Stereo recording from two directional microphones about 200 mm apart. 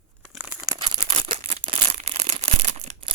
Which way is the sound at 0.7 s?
20° right (ahead or behind).